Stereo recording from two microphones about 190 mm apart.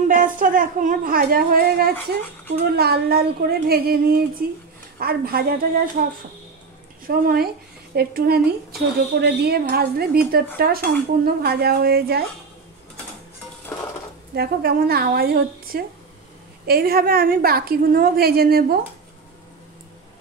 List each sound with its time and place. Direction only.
0.1 s a woman's voice: 45° right (ahead or behind)
7.1 s a woman's voice: 50° right (ahead or behind)
14.3 s a woman's voice: 55° right (ahead or behind)